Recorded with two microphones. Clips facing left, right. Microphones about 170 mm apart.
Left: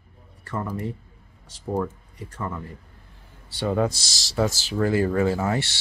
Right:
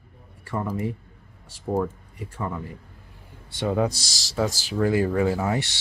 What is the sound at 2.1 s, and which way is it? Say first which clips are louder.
Speech: right 1 dB; 10° right (ahead or behind).